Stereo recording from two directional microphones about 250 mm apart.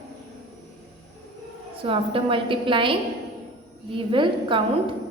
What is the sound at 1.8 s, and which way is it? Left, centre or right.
A woman's voice, right.